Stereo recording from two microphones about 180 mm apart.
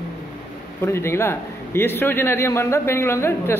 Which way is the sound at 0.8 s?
15° left (ahead or behind).